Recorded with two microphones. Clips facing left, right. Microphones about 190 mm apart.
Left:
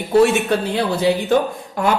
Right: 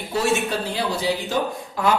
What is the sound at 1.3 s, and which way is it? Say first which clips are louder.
Speech: left 8 dB; 55° left (ahead or behind).